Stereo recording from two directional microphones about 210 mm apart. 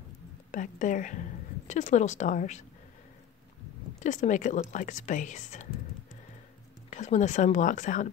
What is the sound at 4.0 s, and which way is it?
Speech, 35° left (ahead or behind).